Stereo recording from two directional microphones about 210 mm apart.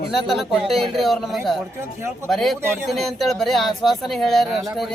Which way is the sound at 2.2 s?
Centre (ahead or behind).